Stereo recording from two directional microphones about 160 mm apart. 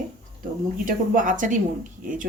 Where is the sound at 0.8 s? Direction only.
55° right (ahead or behind).